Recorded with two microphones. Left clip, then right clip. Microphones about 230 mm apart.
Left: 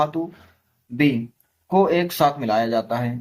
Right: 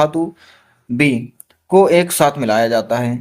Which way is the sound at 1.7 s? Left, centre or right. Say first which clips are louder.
Right 7 dB; right.